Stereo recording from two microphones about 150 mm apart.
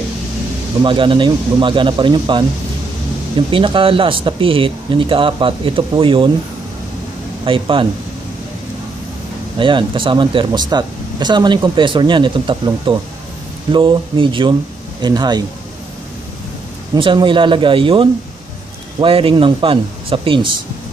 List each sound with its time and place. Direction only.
0.8 s speech: 35° right (ahead or behind)
3.5 s speech: 35° right (ahead or behind)
7.4 s speech: 35° right (ahead or behind)
9.6 s speech: 35° right (ahead or behind)
16.9 s speech: 35° right (ahead or behind)